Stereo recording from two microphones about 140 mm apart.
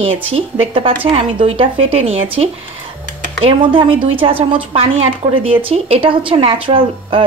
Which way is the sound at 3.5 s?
40° right (ahead or behind).